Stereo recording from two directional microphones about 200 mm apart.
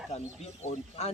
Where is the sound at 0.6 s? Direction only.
30° left (ahead or behind).